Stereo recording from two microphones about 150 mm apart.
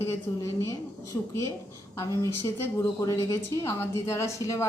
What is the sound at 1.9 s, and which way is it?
A woman's voice, 20° left (ahead or behind).